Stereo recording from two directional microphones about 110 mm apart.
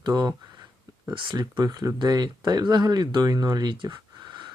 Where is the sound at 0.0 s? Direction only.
40° right (ahead or behind).